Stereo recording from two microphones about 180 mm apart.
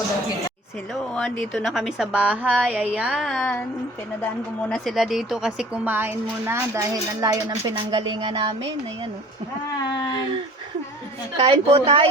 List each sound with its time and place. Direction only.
1.1 s a woman's voice: 5° left (ahead or behind)
4.7 s a woman's voice: centre (ahead or behind); by 8.7 s 25° right (ahead or behind)
9.9 s speech: 20° left (ahead or behind)
11.3 s a woman's voice: 30° right (ahead or behind)